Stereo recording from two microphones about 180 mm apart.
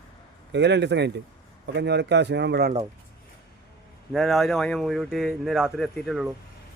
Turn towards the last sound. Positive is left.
turn(degrees=0)  # may be behind; listen again after turning